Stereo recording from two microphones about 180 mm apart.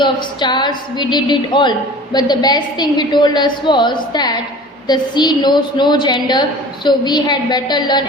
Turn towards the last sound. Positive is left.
turn(degrees=25)  # may be behind; listen again after turning